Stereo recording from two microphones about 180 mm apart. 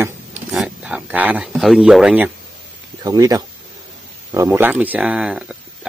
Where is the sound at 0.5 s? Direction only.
5° right (ahead or behind).